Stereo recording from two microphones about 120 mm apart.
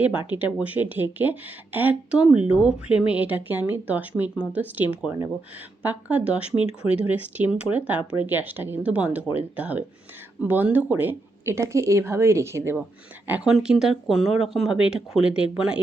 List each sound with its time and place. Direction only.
0.3 s speech: 15° right (ahead or behind)